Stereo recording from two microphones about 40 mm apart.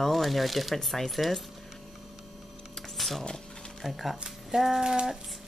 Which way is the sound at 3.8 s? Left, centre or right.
Centre.